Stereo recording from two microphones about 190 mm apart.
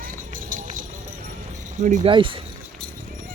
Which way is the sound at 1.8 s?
40° right (ahead or behind).